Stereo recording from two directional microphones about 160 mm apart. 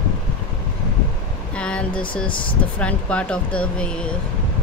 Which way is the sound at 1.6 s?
5° left (ahead or behind).